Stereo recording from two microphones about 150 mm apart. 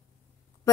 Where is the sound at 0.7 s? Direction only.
20° left (ahead or behind).